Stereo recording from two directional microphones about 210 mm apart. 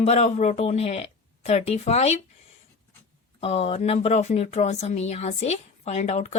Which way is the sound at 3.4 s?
25° left (ahead or behind).